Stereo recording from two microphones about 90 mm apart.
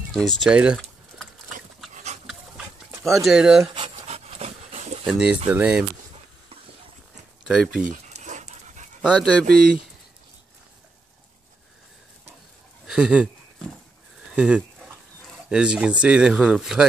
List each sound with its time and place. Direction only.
0.1 s speech: 5° left (ahead or behind)
0.5 s a sound: 10° right (ahead or behind)
1.8 s dog: centre (ahead or behind)
3.0 s speech: centre (ahead or behind)
3.7 s dog: 70° right (ahead or behind)
5.0 s speech: 10° right (ahead or behind)
7.4 s speech: 5° right (ahead or behind)
9.1 s speech: 5° left (ahead or behind)
12.8 s speech: 10° right (ahead or behind)
14.3 s speech: 10° right (ahead or behind)